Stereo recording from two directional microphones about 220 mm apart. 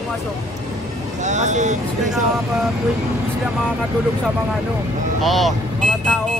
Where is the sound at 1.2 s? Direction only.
35° right (ahead or behind).